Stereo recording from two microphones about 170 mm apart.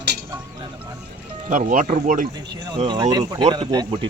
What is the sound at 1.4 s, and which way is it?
Speech, 45° right (ahead or behind).